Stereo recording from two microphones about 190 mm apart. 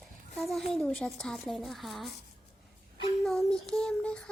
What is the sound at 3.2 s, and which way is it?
Child singing, centre (ahead or behind).